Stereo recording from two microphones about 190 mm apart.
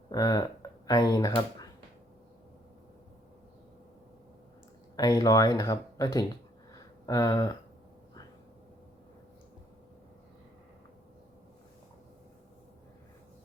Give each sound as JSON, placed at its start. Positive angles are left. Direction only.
{"t": 0.1, "sound": "speech", "side_deg": 20}
{"t": 4.9, "sound": "speech", "side_deg": 20}
{"t": 6.7, "sound": "a sound", "side_deg": 20}